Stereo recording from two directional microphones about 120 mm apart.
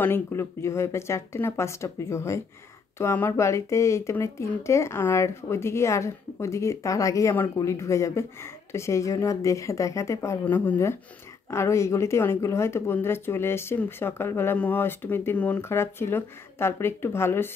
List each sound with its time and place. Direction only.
0.0 s speech: 20° left (ahead or behind)
10.4 s speech: 15° left (ahead or behind)